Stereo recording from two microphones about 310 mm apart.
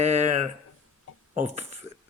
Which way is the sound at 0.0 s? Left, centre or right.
Right.